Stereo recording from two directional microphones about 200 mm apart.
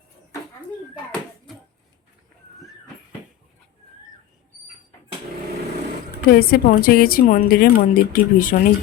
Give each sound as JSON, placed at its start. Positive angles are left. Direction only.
{"t": 6.3, "sound": "a woman's voice", "side_deg": 50}